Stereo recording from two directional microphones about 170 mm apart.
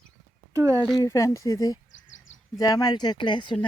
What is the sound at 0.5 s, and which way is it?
Speech, 20° right (ahead or behind).